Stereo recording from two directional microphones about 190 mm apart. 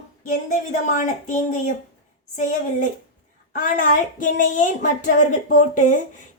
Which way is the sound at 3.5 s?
45° left (ahead or behind).